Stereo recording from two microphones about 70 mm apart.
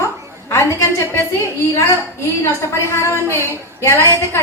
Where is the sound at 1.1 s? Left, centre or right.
Left.